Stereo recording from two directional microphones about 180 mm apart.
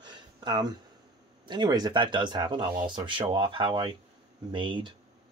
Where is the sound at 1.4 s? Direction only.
25° right (ahead or behind).